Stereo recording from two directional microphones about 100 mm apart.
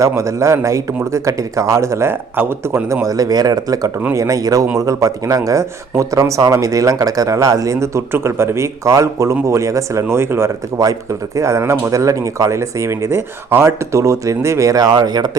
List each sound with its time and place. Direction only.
0.2 s speech: 30° right (ahead or behind)